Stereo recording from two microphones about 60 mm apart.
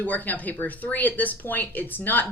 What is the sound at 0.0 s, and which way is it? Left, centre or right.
A woman's voice, left.